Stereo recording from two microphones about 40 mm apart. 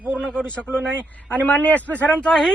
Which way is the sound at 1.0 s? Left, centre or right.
Left.